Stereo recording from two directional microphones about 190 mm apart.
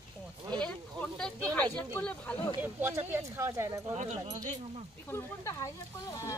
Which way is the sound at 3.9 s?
35° right (ahead or behind).